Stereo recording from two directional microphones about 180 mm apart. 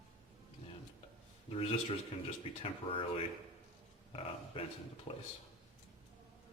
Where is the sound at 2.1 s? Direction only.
35° left (ahead or behind).